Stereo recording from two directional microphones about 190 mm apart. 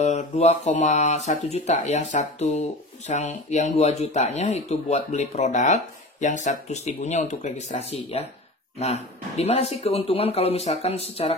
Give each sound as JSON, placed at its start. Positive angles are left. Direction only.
{"t": 0.0, "sound": "speech", "side_deg": 35}